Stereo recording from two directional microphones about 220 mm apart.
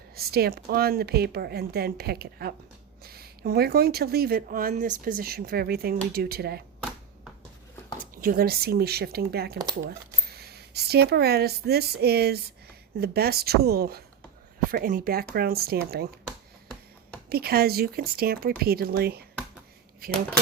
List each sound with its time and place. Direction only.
0.2 s speech: 45° right (ahead or behind)
8.1 s speech: 40° right (ahead or behind)
17.2 s speech: 45° right (ahead or behind)